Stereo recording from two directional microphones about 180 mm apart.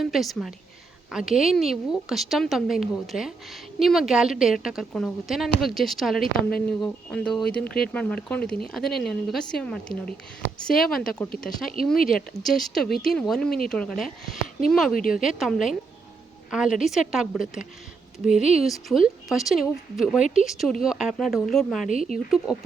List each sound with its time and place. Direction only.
0.0 s a woman's voice: centre (ahead or behind)
11.9 s speech: 50° left (ahead or behind)
12.4 s a woman's voice: centre (ahead or behind)
14.9 s speech: 50° left (ahead or behind)
15.2 s a woman's voice: centre (ahead or behind)
16.7 s a woman's voice: centre (ahead or behind)